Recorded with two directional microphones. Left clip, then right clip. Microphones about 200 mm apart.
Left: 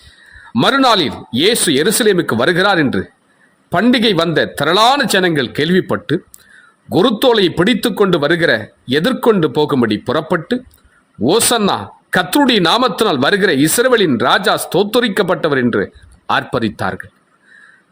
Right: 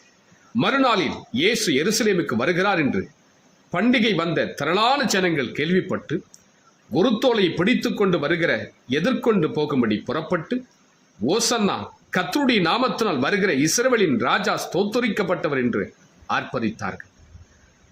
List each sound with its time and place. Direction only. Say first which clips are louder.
0.5 s speech: left 8 dB; 50° left (ahead or behind)